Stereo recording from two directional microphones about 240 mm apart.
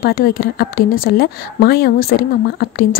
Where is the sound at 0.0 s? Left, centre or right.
Left.